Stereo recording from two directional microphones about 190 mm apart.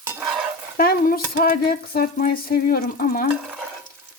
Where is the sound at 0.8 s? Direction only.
50° left (ahead or behind).